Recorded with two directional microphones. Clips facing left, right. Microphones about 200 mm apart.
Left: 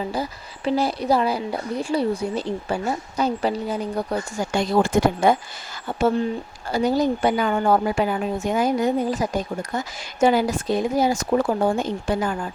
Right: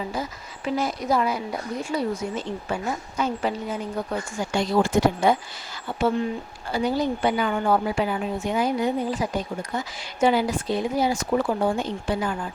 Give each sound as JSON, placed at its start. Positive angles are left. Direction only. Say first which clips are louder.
{"t": 0.1, "sound": "a woman's voice", "louder": "left 3 dB", "side_deg": 35}